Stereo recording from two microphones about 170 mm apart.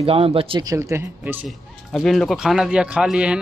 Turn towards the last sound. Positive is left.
turn(degrees=-5)  # may be behind; listen again after turning